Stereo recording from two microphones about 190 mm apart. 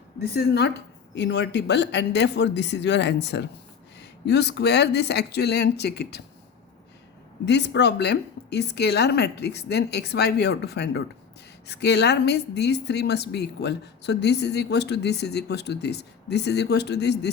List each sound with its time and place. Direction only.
0.2 s speech: 55° left (ahead or behind)
7.4 s speech: 65° left (ahead or behind)